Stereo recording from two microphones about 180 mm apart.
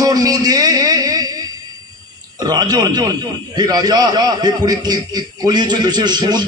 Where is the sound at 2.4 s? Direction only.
20° right (ahead or behind).